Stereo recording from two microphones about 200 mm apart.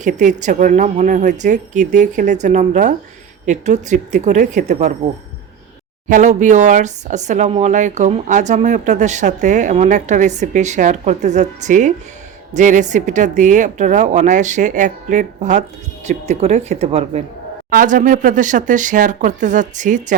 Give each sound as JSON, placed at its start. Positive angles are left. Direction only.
{"t": 0.0, "sound": "speech", "side_deg": -40}
{"t": 6.1, "sound": "speech", "side_deg": -40}
{"t": 17.7, "sound": "speech", "side_deg": -40}